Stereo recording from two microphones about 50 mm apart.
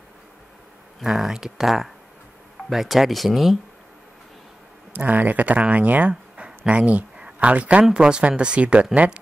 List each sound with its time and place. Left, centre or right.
1.0 s speech: centre
4.9 s speech: right